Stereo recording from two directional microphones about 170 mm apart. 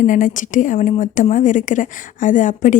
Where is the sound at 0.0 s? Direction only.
50° left (ahead or behind).